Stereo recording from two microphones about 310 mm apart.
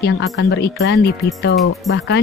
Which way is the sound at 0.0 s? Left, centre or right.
Left.